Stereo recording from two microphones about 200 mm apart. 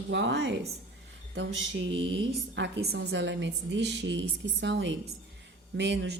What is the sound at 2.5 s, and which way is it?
A woman's voice, 60° right (ahead or behind).